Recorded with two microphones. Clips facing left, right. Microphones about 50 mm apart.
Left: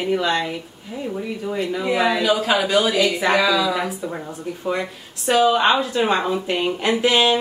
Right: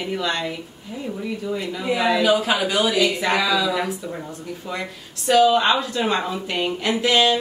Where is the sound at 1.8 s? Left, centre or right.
Centre.